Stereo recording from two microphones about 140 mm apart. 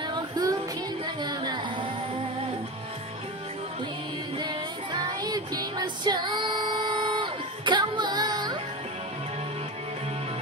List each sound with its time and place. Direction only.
0.1 s music: 30° right (ahead or behind)
4.4 s music: 30° right (ahead or behind)